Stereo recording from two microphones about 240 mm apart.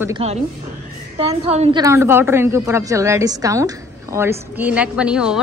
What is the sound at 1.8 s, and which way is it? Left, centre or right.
A woman's voice, centre.